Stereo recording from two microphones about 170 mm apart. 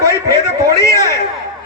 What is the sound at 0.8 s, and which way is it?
Speech, 15° left (ahead or behind).